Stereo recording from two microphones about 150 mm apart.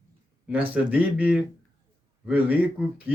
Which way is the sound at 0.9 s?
10° right (ahead or behind).